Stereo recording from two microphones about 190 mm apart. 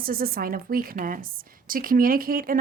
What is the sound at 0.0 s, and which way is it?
A woman's voice, 50° right (ahead or behind).